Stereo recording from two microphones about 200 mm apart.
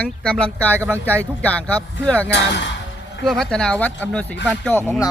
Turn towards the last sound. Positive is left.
turn(degrees=10)  # may be behind; listen again after turning